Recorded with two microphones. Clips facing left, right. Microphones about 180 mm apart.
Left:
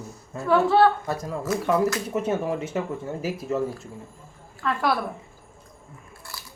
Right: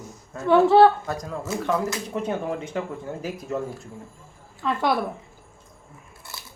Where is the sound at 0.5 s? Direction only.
25° right (ahead or behind).